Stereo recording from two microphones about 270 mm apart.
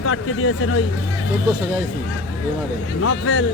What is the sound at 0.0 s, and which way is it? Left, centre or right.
Speech, left.